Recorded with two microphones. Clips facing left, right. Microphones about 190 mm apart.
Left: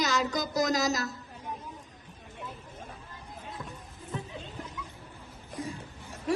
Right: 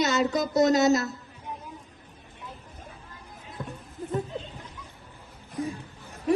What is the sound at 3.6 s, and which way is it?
Clip-clop, 25° right (ahead or behind).